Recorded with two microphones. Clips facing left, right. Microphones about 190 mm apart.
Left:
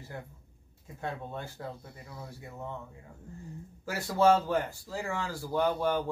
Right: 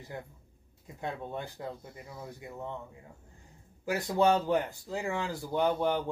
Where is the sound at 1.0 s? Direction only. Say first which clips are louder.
Right 1 dB; 15° right (ahead or behind).